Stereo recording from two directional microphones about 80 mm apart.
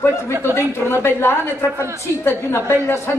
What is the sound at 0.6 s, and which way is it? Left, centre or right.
A woman's voice, left.